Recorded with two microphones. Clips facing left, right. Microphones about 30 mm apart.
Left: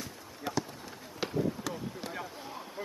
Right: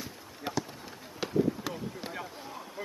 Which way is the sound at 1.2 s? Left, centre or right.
Centre.